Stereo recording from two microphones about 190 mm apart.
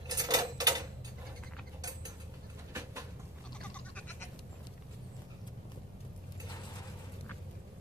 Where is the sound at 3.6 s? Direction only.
5° left (ahead or behind).